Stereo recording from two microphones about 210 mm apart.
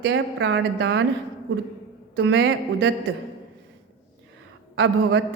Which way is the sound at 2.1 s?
60° right (ahead or behind).